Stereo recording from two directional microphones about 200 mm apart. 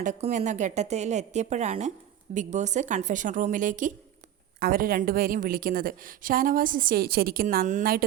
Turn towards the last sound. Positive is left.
turn(degrees=-40)  # may be behind; listen again after turning